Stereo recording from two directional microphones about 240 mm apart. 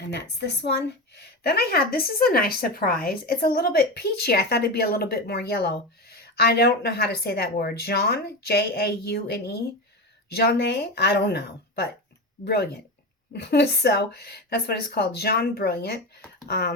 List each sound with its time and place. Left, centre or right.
0.1 s a woman's voice: left